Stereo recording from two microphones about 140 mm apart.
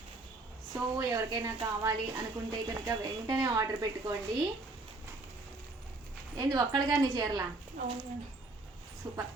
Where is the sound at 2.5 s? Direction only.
25° right (ahead or behind).